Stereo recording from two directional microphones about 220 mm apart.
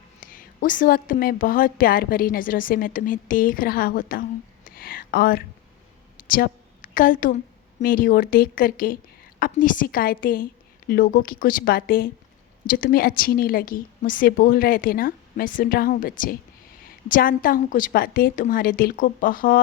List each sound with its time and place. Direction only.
0.2 s a woman's voice: 40° left (ahead or behind)